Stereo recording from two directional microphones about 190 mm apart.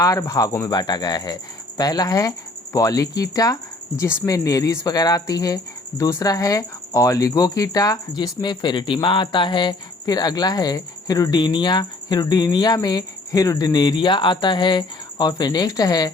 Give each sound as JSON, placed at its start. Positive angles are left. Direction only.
{"t": 0.0, "sound": "speech", "side_deg": 20}